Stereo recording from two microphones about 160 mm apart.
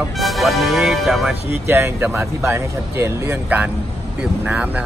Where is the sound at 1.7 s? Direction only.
15° right (ahead or behind).